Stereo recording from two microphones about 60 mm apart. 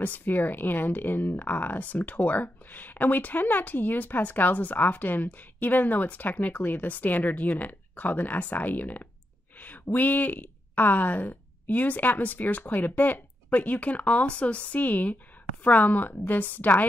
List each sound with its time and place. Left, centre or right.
0.0 s speech: left